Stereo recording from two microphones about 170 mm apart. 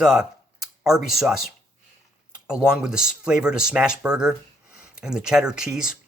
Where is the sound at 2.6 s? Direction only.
5° right (ahead or behind).